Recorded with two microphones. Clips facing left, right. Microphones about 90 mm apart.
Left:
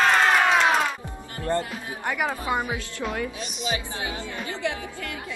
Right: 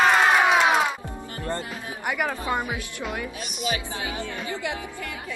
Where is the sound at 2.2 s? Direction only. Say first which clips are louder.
Left 2 dB; 20° left (ahead or behind).